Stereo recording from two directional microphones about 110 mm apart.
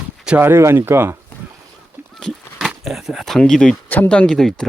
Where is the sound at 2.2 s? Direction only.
Centre (ahead or behind).